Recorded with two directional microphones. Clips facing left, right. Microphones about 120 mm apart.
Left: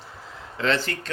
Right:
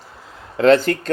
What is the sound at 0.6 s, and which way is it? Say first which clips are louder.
Speech: right 12 dB; 45° right (ahead or behind).